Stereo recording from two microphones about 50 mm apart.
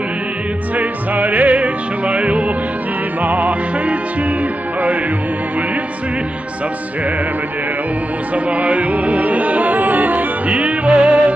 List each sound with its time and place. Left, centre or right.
0.7 s music: right
8.5 s music: right